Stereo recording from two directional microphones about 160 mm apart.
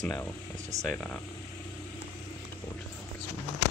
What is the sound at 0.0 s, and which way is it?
Speech, 10° left (ahead or behind).